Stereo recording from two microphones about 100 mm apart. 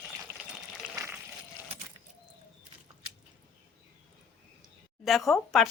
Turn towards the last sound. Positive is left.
turn(degrees=0)  # may be behind; listen again after turning